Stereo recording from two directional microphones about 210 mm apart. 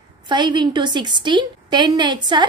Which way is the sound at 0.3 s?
20° right (ahead or behind).